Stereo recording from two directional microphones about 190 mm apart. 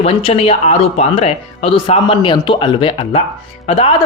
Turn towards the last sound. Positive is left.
turn(degrees=30)  # may be behind; listen again after turning